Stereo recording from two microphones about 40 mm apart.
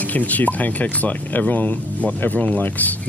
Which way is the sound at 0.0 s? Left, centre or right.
Left.